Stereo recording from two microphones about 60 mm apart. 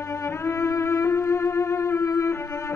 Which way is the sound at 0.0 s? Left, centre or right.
Left.